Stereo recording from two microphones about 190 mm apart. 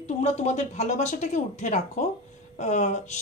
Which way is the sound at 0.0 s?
40° left (ahead or behind).